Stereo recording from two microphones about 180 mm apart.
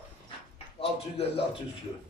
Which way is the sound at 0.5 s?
35° left (ahead or behind).